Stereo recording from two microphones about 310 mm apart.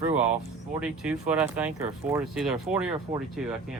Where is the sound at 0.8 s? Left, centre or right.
Centre.